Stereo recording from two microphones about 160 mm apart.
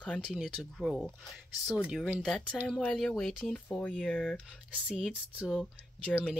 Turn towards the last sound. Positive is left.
turn(degrees=-5)  # may be behind; listen again after turning